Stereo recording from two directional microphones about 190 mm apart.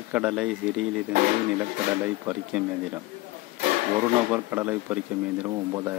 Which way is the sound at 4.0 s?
10° right (ahead or behind).